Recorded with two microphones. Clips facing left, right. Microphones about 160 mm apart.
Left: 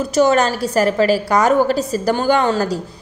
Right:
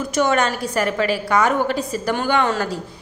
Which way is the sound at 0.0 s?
35° left (ahead or behind).